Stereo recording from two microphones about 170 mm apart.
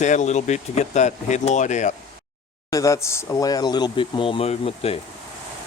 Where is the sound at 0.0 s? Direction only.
45° left (ahead or behind).